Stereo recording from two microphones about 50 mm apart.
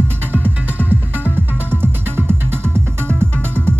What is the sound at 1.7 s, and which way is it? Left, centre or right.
Music, right.